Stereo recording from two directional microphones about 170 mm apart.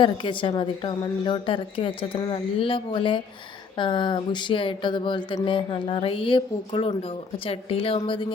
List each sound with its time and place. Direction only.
0.0 s a woman's voice: 30° left (ahead or behind)